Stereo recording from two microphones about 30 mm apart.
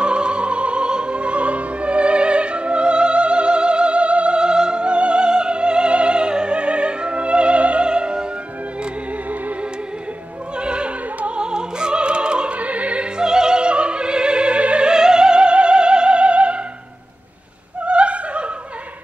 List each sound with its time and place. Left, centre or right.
0.0 s music: right
4.4 s opera: right
4.8 s music: right
7.9 s music: right
10.6 s opera: right
12.5 s opera: right
13.2 s opera: right
14.9 s opera: right
17.8 s opera: right